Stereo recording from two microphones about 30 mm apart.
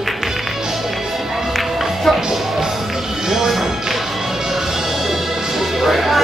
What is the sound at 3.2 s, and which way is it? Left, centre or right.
Music, centre.